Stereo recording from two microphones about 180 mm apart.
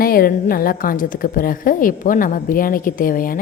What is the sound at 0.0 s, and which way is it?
A woman's voice, 55° left (ahead or behind).